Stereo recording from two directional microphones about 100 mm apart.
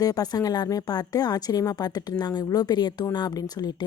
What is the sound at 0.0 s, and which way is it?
A woman's voice, 40° left (ahead or behind).